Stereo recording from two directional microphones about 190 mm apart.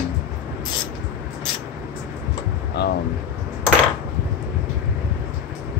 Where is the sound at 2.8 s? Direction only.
60° left (ahead or behind).